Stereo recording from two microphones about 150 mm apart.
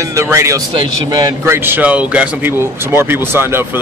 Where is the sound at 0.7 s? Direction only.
30° right (ahead or behind).